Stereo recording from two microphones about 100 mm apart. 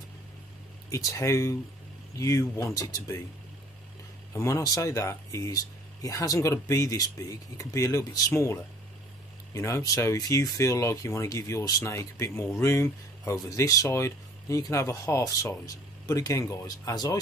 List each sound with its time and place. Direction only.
0.8 s speech: 35° left (ahead or behind)
4.3 s speech: 30° left (ahead or behind)